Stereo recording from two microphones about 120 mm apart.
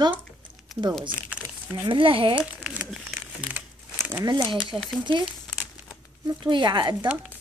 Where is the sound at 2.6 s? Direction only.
Centre (ahead or behind).